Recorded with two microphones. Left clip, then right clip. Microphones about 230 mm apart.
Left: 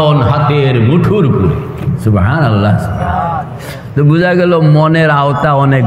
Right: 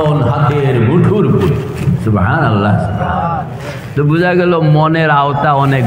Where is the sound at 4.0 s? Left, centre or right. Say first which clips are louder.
Left 2 dB; left.